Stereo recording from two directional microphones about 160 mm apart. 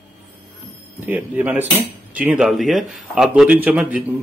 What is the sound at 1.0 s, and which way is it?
Cutlery, 10° right (ahead or behind).